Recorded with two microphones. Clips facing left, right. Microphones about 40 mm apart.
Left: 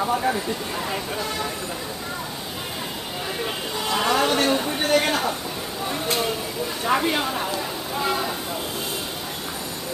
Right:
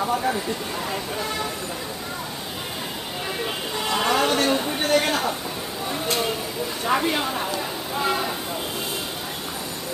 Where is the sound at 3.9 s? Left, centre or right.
Centre.